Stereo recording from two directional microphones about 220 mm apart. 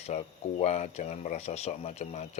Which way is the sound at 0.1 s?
30° left (ahead or behind).